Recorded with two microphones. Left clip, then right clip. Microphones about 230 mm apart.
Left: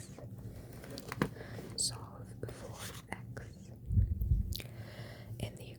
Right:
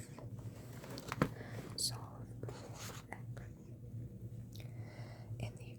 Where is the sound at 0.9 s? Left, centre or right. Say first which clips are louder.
Left 1 dB; centre.